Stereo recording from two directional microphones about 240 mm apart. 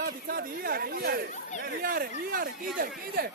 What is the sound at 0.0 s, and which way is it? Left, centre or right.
Speech, right.